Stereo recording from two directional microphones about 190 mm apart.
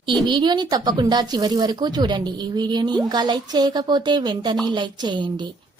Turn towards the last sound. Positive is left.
turn(degrees=-25)  # may be behind; listen again after turning